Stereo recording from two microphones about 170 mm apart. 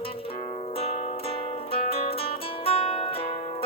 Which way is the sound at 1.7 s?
35° left (ahead or behind).